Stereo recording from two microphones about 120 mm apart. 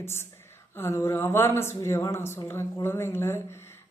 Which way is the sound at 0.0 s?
20° left (ahead or behind).